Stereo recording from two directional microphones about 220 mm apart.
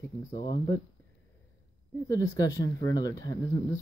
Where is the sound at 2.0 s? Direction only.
15° left (ahead or behind).